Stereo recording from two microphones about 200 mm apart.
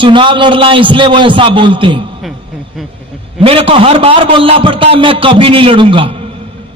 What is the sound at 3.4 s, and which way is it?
A man's voice, 30° right (ahead or behind).